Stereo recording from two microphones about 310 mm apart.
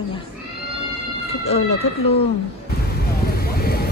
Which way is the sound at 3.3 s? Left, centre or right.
Left.